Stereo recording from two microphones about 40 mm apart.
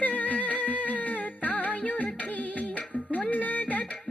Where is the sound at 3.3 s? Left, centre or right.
Left.